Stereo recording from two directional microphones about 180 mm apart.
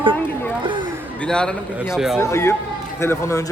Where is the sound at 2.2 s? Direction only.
15° left (ahead or behind).